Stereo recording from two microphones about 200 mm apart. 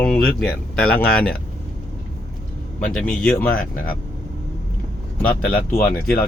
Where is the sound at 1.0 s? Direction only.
50° left (ahead or behind).